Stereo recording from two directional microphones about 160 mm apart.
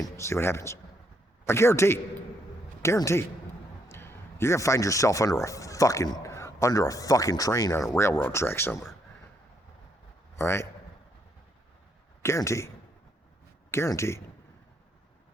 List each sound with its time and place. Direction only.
0.0 s speech: 15° left (ahead or behind)
10.3 s a man's voice: 15° left (ahead or behind)
12.2 s speech: 15° left (ahead or behind)